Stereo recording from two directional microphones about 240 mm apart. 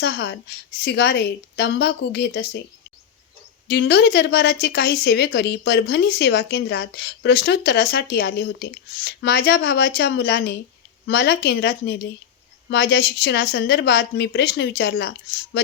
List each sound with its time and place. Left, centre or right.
0.0 s speech: left
3.7 s speech: left
15.5 s a sound: left